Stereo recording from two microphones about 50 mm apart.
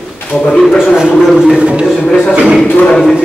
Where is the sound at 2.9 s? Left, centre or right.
Centre.